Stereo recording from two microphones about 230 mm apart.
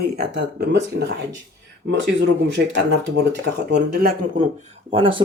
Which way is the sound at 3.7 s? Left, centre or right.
Right.